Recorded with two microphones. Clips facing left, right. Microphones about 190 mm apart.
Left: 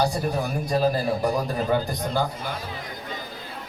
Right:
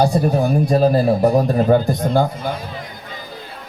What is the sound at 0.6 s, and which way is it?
Speech, 25° right (ahead or behind).